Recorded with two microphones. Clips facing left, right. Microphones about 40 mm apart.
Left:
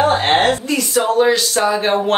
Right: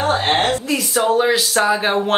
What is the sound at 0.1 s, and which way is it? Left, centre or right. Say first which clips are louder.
Speech: left 3 dB; centre.